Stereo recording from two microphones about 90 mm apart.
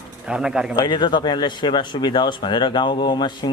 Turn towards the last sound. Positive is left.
turn(degrees=55)  # may be behind; listen again after turning